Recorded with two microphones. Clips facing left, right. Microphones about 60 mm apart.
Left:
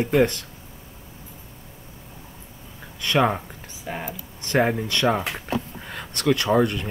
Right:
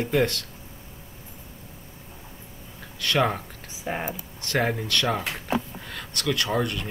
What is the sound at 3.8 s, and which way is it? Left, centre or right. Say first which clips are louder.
Speech: right 2 dB; centre.